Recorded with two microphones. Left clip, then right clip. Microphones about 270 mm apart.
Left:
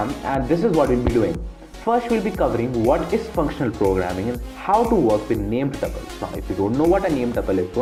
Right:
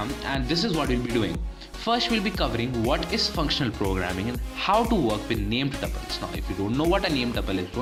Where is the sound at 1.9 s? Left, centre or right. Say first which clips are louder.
Left 5 dB; right.